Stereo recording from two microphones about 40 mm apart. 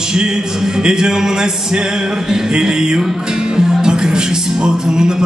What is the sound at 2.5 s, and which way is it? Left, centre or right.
Speech, centre.